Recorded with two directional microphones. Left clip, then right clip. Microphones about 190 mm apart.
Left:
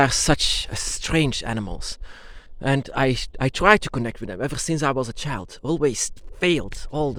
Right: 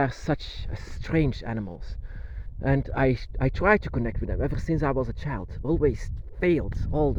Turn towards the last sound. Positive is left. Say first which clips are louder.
# left 1 dB
turn(degrees=5)  # may be behind; listen again after turning